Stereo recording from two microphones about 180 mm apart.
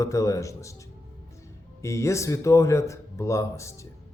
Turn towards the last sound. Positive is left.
turn(degrees=15)  # may be behind; listen again after turning